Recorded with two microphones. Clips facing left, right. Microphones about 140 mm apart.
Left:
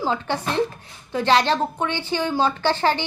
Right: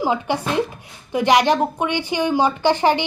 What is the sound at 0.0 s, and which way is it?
A woman's voice, 15° right (ahead or behind).